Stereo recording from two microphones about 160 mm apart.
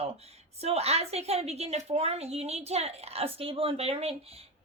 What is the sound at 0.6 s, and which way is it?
Speech, 40° right (ahead or behind).